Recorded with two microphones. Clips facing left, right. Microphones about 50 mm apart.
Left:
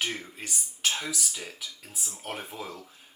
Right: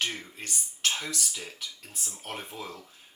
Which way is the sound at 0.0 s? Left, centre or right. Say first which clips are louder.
Even; centre.